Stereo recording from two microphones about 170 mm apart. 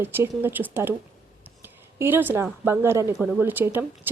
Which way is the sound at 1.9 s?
10° right (ahead or behind).